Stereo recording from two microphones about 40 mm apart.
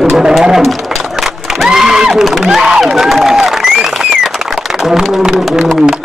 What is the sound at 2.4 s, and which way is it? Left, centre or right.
Speech, centre.